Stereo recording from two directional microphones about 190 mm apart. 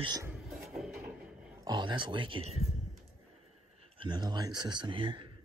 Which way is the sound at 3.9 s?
25° right (ahead or behind).